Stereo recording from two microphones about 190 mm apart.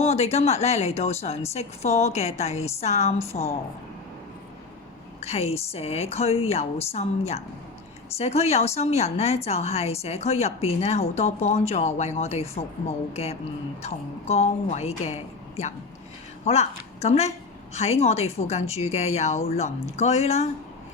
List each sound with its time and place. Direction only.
0.0 s a woman's voice: 35° left (ahead or behind)
5.2 s a woman's voice: 35° left (ahead or behind)
13.8 s a woman's voice: 35° left (ahead or behind)